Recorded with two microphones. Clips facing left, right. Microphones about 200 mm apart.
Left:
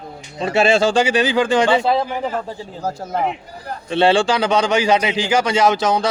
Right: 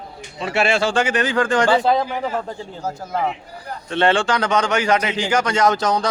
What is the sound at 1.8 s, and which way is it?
Speech, 5° left (ahead or behind).